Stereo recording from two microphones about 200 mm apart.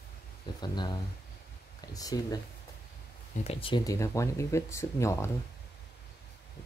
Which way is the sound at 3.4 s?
25° left (ahead or behind).